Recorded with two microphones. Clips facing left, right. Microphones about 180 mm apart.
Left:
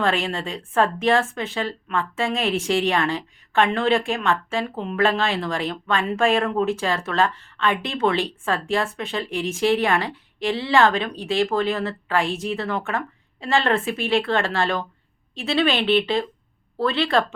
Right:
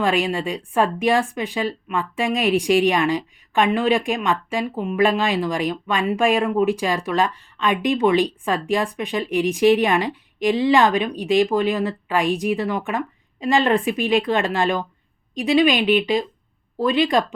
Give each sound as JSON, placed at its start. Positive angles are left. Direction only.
{"t": 0.0, "sound": "speech", "side_deg": -15}